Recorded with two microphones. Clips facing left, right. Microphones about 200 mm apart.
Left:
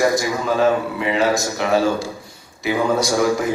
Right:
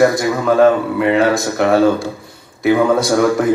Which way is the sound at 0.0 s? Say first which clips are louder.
Right 5 dB; 55° right (ahead or behind).